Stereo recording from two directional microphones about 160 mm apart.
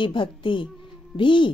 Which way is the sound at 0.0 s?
30° left (ahead or behind).